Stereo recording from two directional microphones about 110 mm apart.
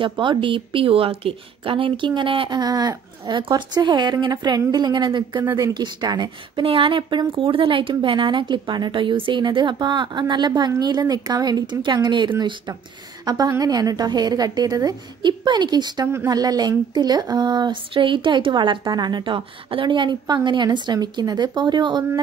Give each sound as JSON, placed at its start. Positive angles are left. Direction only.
{"t": 0.0, "sound": "speech", "side_deg": -50}
{"t": 2.6, "sound": "speech", "side_deg": -35}
{"t": 5.4, "sound": "speech", "side_deg": -30}
{"t": 5.8, "sound": "speech", "side_deg": -40}